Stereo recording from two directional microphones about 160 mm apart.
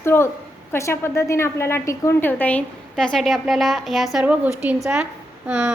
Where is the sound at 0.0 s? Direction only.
15° left (ahead or behind).